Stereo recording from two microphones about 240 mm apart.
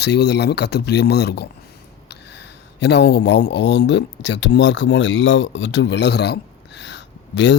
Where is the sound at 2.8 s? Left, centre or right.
Left.